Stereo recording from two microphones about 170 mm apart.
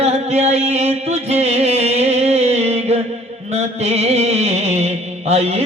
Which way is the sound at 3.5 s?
40° right (ahead or behind).